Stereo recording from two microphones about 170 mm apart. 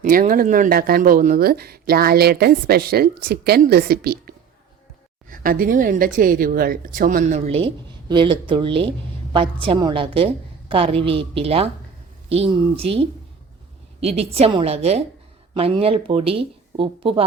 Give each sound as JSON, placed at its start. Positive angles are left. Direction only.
{"t": 0.0, "sound": "speech", "side_deg": -55}
{"t": 7.3, "sound": "speech", "side_deg": -35}